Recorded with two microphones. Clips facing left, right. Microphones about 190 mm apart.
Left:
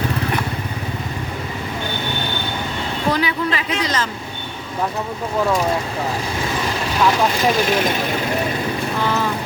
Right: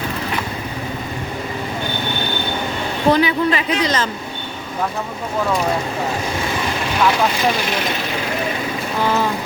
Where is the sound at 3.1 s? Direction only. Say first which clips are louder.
Right 5 dB; 25° right (ahead or behind).